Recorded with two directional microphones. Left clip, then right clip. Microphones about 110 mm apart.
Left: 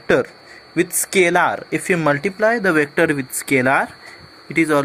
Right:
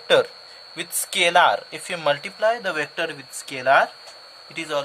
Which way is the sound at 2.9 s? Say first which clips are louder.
Left 10 dB; 75° left (ahead or behind).